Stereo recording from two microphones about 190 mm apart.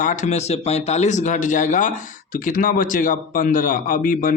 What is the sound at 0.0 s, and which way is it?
A man's voice, 40° left (ahead or behind).